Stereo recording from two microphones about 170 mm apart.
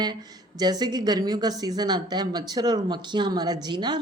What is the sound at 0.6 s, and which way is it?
Speech, 25° right (ahead or behind).